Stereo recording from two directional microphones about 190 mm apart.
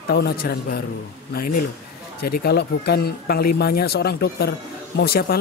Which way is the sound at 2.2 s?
55° left (ahead or behind).